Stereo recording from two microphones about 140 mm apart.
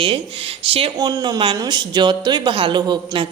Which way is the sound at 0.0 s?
40° right (ahead or behind).